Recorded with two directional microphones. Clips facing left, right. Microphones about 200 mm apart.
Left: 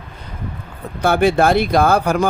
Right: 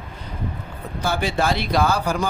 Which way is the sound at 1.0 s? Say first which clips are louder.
Left 8 dB; 60° left (ahead or behind).